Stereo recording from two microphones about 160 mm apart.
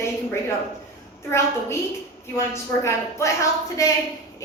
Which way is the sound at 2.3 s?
15° left (ahead or behind).